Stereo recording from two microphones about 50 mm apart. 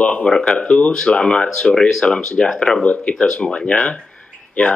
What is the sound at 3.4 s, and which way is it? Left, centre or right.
Speech, left.